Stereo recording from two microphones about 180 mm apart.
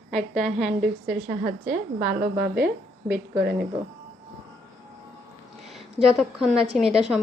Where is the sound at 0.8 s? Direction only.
50° right (ahead or behind).